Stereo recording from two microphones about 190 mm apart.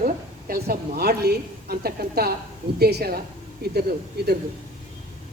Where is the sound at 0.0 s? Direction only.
50° right (ahead or behind).